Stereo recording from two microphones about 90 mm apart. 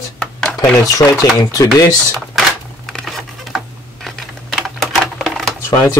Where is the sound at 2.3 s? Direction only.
5° left (ahead or behind).